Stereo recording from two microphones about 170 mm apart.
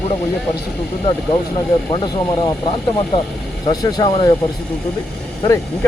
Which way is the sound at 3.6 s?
25° left (ahead or behind).